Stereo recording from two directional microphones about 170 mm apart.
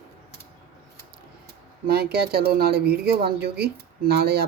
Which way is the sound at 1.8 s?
65° right (ahead or behind).